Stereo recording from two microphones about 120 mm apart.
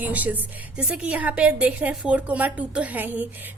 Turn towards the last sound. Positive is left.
turn(degrees=-15)  # may be behind; listen again after turning